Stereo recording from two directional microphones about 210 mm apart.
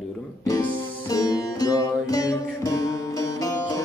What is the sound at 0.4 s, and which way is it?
Music, 10° left (ahead or behind).